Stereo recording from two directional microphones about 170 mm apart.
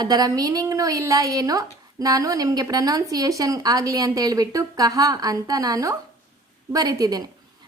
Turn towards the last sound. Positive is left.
turn(degrees=-20)  # may be behind; listen again after turning